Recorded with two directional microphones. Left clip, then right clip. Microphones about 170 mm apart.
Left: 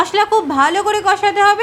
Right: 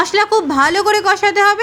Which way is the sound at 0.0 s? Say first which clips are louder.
Even; 15° right (ahead or behind).